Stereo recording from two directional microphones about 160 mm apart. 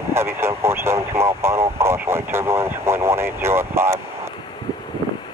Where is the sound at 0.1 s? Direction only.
15° right (ahead or behind).